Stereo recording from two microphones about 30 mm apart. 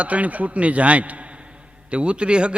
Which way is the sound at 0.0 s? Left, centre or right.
Right.